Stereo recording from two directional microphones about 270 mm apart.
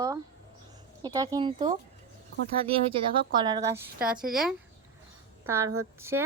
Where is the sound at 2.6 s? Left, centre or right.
Right.